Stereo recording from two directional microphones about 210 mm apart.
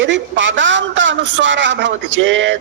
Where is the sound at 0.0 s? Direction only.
60° right (ahead or behind).